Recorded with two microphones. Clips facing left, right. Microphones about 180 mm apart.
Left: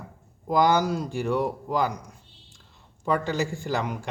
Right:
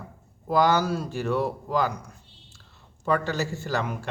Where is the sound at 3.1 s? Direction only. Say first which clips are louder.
Even; 15° left (ahead or behind).